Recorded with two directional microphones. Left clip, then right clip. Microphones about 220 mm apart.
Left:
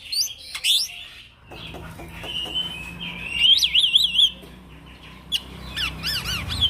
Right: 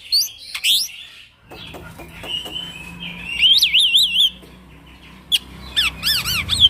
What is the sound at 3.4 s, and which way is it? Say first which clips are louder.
Alarm: right 3 dB; 15° right (ahead or behind).